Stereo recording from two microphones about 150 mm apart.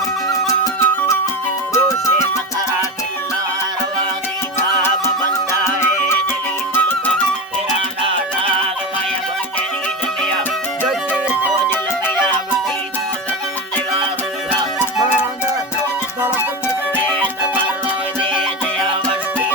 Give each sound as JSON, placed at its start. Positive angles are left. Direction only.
{"t": 0.4, "sound": "music", "side_deg": 20}
{"t": 6.7, "sound": "music", "side_deg": 15}
{"t": 10.8, "sound": "music", "side_deg": -5}